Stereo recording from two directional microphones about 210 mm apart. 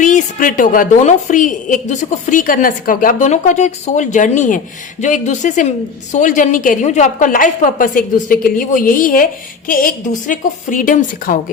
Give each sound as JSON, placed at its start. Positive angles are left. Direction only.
{"t": 0.0, "sound": "a woman's voice", "side_deg": 40}